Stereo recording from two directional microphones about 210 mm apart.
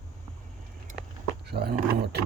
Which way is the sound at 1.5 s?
50° right (ahead or behind).